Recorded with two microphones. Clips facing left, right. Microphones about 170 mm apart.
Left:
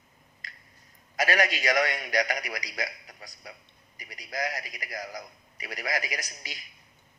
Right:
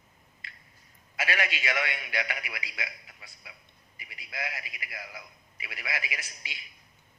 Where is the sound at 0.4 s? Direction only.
40° left (ahead or behind).